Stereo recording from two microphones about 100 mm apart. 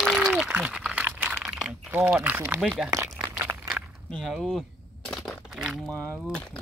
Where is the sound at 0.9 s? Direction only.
15° right (ahead or behind).